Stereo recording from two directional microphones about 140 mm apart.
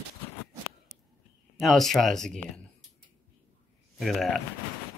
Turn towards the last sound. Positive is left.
turn(degrees=0)  # may be behind; listen again after turning